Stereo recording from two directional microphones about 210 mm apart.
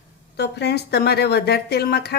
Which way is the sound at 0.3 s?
55° left (ahead or behind).